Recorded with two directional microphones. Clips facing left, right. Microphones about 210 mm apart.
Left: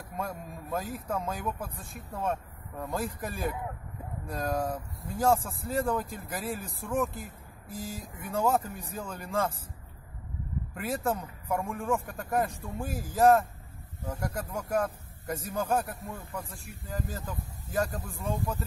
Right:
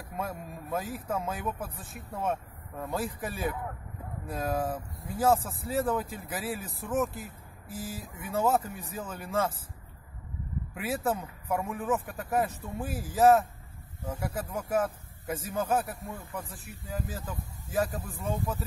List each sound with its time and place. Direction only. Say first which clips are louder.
0.2 s speech: even; 5° right (ahead or behind)
10.7 s speech: even; 5° right (ahead or behind)